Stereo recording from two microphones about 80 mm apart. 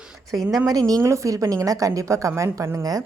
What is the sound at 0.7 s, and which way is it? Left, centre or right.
A woman's voice, right.